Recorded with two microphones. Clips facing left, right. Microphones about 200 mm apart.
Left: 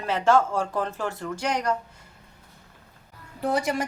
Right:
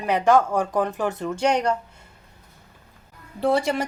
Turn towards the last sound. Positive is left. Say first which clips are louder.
# right 4 dB
turn(degrees=-25)  # may be behind; listen again after turning